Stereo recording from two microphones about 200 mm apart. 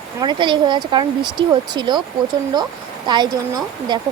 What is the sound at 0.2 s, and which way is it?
Speech, 25° right (ahead or behind).